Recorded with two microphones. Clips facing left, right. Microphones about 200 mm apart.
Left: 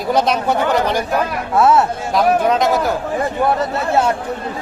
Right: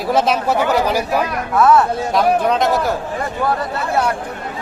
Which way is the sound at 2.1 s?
Centre (ahead or behind).